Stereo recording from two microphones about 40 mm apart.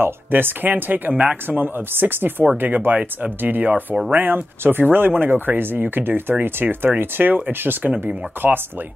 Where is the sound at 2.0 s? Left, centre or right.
Right.